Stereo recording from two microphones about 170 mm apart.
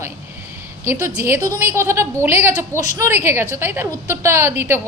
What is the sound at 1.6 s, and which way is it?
A woman's voice, 15° right (ahead or behind).